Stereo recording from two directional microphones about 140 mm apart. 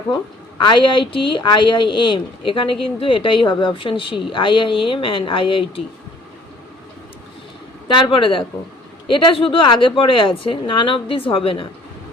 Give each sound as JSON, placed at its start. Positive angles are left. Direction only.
{"t": 0.6, "sound": "a woman's voice", "side_deg": 35}
{"t": 7.9, "sound": "a woman's voice", "side_deg": 35}